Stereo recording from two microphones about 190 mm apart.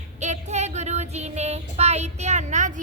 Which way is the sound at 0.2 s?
35° right (ahead or behind).